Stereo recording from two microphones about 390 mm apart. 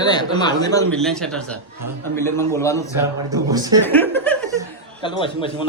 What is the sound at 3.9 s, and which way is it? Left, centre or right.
Chuckle, centre.